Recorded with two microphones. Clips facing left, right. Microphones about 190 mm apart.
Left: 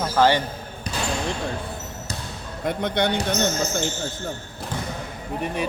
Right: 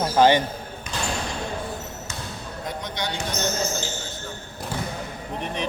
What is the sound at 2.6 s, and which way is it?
Speech, 60° left (ahead or behind).